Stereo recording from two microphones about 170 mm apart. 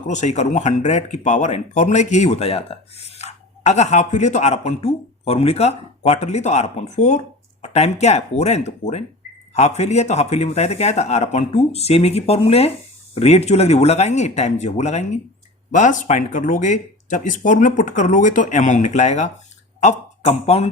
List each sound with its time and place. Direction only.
0.1 s speech: 45° left (ahead or behind)